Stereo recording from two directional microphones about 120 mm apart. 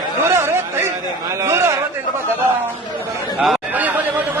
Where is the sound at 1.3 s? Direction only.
25° right (ahead or behind).